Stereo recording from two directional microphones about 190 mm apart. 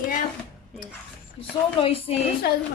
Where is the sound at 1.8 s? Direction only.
30° left (ahead or behind).